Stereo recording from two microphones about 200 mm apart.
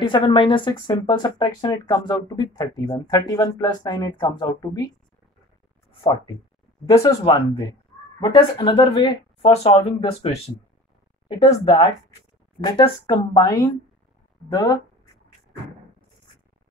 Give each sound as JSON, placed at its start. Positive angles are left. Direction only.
{"t": 0.0, "sound": "speech", "side_deg": 25}
{"t": 6.9, "sound": "speech", "side_deg": 20}